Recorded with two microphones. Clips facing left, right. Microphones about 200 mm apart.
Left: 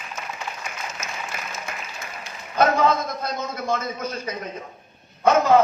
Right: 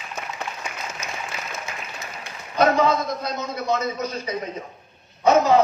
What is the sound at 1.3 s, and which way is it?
Applause, 50° left (ahead or behind).